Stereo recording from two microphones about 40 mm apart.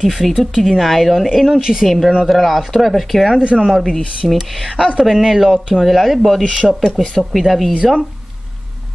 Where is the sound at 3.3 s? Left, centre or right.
Right.